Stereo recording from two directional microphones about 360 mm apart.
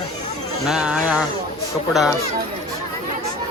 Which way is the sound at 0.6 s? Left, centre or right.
Centre.